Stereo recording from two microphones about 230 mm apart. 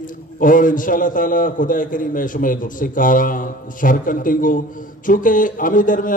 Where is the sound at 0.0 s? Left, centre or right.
Left.